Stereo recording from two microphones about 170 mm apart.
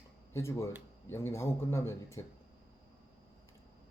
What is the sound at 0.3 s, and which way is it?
A man's voice, 15° left (ahead or behind).